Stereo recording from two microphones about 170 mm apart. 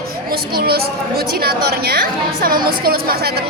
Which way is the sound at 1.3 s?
65° right (ahead or behind).